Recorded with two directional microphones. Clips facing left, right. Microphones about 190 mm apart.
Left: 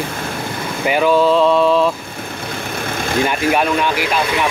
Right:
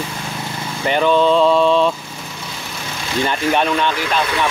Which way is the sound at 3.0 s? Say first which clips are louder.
Left 3 dB; 50° left (ahead or behind).